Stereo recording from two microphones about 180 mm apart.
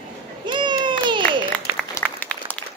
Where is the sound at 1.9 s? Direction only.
10° left (ahead or behind).